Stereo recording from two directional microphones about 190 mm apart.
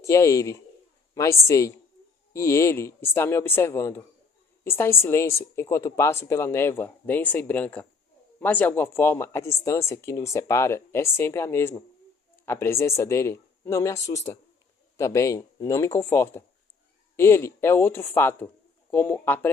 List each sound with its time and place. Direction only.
0.0 s speech: 15° left (ahead or behind)